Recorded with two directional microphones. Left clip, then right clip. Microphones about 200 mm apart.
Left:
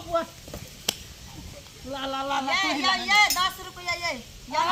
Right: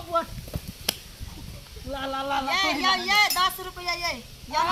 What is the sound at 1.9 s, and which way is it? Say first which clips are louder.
Speech: even; 15° left (ahead or behind).